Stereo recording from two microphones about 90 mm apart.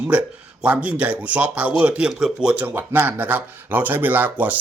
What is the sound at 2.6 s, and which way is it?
Speech, 25° right (ahead or behind).